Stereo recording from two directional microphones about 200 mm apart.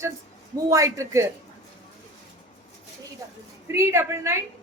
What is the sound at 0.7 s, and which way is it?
Speech, 15° right (ahead or behind).